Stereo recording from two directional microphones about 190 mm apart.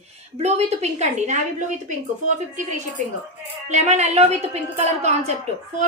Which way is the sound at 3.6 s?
35° right (ahead or behind).